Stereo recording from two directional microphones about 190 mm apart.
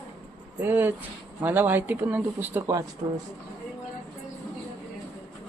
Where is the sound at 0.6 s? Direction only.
10° right (ahead or behind).